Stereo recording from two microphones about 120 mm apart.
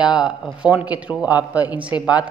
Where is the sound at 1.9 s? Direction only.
40° left (ahead or behind).